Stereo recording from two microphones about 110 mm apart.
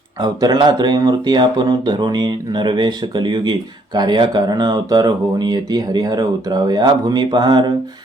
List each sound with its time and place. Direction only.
0.2 s speech: 40° right (ahead or behind)